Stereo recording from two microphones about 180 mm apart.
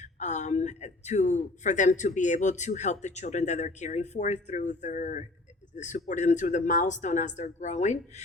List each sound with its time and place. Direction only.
0.0 s speech: 40° left (ahead or behind)